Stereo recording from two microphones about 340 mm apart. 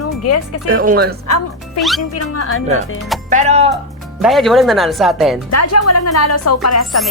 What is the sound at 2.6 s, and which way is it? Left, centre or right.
Speech, right.